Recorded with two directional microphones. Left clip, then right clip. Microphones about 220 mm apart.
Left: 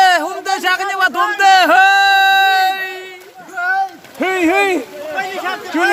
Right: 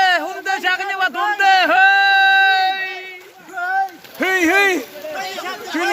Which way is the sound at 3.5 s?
35° left (ahead or behind).